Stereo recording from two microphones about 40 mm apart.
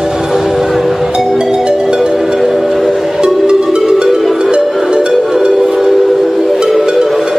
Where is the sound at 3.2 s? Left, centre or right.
Centre.